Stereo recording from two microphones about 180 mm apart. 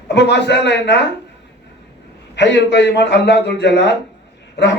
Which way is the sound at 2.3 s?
75° left (ahead or behind).